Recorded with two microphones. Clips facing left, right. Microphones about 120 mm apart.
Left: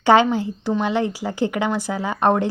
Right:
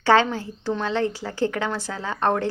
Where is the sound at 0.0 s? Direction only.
15° left (ahead or behind).